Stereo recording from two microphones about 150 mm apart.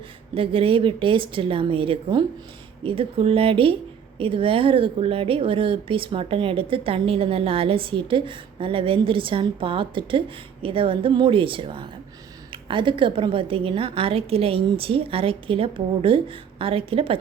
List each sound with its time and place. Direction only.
0.3 s speech: 40° right (ahead or behind)